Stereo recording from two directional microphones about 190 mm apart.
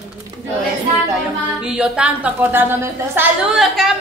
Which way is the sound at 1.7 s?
5° right (ahead or behind).